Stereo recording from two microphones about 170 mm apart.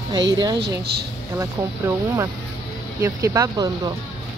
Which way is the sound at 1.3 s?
15° right (ahead or behind).